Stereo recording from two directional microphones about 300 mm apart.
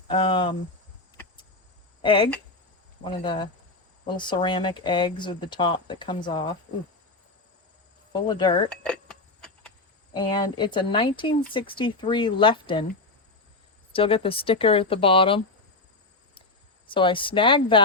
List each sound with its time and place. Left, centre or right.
0.1 s speech: centre
2.0 s speech: centre
8.1 s speech: centre
10.2 s speech: centre
13.9 s speech: centre
16.8 s speech: centre